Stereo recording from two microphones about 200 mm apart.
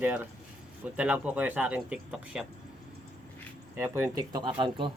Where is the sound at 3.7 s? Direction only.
15° right (ahead or behind).